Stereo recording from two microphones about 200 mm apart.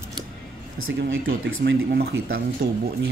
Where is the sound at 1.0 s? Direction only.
70° right (ahead or behind).